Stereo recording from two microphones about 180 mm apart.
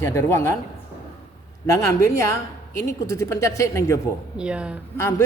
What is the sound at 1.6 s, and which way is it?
Speech, 15° left (ahead or behind).